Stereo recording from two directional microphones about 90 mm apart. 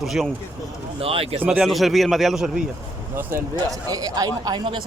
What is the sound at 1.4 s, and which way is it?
A man's voice, 10° right (ahead or behind).